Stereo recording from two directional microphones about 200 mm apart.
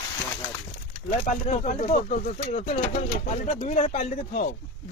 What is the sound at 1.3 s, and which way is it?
Speech, 35° left (ahead or behind).